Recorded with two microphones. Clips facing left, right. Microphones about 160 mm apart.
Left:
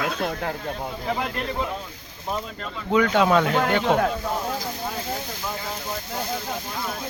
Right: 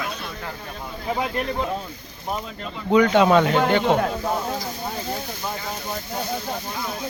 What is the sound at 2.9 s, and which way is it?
Speech, centre (ahead or behind).